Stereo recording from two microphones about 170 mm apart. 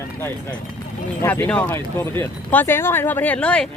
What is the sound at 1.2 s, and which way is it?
Speech, 10° left (ahead or behind).